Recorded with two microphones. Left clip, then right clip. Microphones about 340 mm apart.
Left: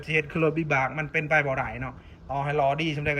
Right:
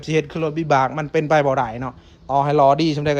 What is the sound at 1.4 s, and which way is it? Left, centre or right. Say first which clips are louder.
Speech: right 9 dB; right.